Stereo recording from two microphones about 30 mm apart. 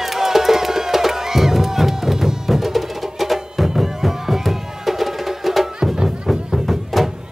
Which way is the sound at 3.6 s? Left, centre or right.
Centre.